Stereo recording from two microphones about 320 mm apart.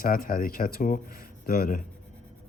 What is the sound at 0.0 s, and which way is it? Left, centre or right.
Speech, left.